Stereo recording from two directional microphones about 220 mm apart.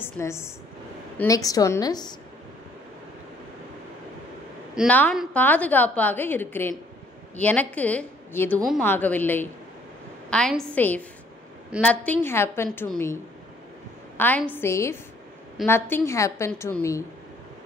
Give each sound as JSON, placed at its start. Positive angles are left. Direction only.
{"t": 0.0, "sound": "a woman's voice", "side_deg": 10}
{"t": 4.7, "sound": "a woman's voice", "side_deg": 5}